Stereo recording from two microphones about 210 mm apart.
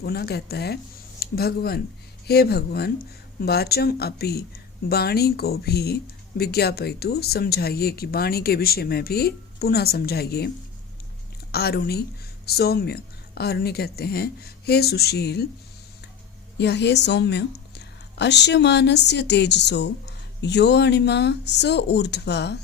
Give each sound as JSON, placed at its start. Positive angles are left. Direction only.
{"t": 0.0, "sound": "speech", "side_deg": 50}
{"t": 11.5, "sound": "speech", "side_deg": 50}
{"t": 16.6, "sound": "speech", "side_deg": 55}